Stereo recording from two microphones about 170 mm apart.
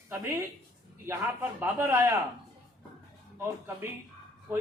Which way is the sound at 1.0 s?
15° right (ahead or behind).